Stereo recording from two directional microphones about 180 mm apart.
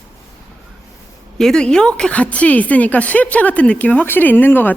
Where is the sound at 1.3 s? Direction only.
5° left (ahead or behind).